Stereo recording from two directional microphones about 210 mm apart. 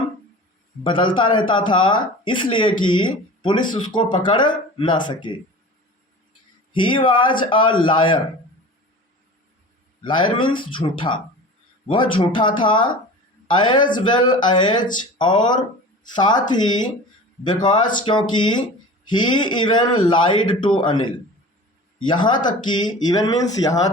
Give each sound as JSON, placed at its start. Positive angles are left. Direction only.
{"t": 0.9, "sound": "speech", "side_deg": 25}
{"t": 6.7, "sound": "speech", "side_deg": 25}
{"t": 10.0, "sound": "speech", "side_deg": 25}